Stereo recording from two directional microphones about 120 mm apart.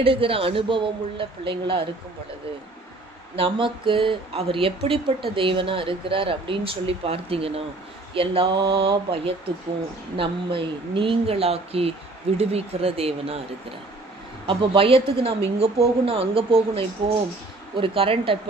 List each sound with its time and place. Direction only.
0.0 s speech: 50° right (ahead or behind)
3.3 s speech: 45° right (ahead or behind)
14.4 s speech: 50° right (ahead or behind)